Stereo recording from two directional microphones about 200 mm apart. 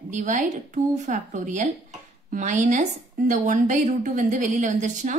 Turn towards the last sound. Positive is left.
turn(degrees=-40)  # may be behind; listen again after turning